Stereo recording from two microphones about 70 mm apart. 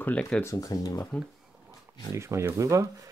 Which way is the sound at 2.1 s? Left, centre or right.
Right.